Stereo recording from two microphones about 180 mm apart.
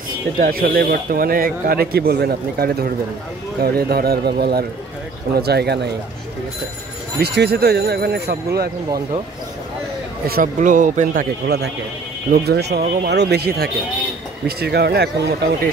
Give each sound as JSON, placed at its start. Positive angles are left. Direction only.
{"t": 0.4, "sound": "a man's voice", "side_deg": -55}
{"t": 7.2, "sound": "a man's voice", "side_deg": -65}
{"t": 10.2, "sound": "speech", "side_deg": -55}
{"t": 11.4, "sound": "a man's voice", "side_deg": -65}